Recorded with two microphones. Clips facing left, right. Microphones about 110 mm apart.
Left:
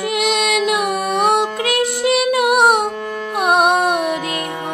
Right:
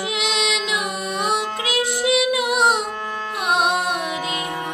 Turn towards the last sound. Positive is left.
turn(degrees=55)  # may be behind; listen again after turning